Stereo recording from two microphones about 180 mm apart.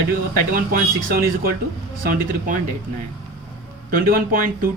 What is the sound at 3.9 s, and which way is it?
Speech, 50° right (ahead or behind).